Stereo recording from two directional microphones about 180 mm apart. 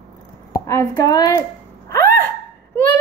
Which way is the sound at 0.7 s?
15° left (ahead or behind).